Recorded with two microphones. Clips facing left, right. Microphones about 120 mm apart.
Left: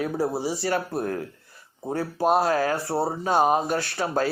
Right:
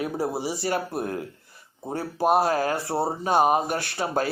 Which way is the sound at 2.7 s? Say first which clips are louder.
Left 1 dB; 20° right (ahead or behind).